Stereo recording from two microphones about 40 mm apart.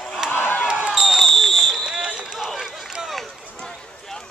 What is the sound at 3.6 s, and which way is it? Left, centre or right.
Run, centre.